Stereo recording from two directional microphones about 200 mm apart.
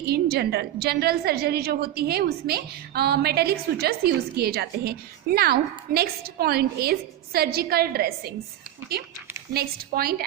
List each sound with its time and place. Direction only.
0.0 s a woman's voice: 50° right (ahead or behind)
9.5 s a woman's voice: 50° right (ahead or behind)